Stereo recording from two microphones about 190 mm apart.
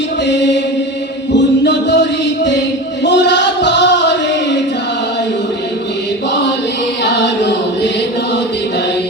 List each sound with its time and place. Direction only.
0.3 s chant: 65° left (ahead or behind)
3.0 s a sound: 65° left (ahead or behind)
7.0 s choir: 65° left (ahead or behind)